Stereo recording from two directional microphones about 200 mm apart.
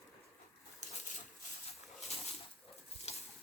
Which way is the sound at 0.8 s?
35° left (ahead or behind).